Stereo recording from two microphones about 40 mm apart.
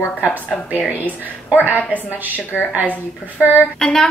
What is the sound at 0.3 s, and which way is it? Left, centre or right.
A woman's voice, right.